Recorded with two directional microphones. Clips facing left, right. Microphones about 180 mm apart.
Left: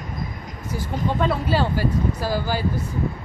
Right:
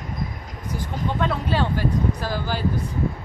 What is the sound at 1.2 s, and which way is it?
Speech, 5° left (ahead or behind).